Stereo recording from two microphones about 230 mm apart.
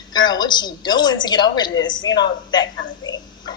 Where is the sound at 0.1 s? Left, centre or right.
Centre.